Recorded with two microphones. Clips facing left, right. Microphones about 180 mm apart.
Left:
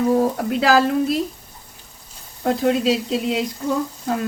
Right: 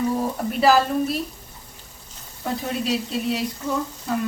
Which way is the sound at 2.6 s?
90° left.